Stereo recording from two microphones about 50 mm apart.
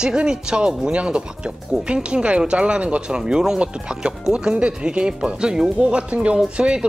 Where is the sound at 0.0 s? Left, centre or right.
Centre.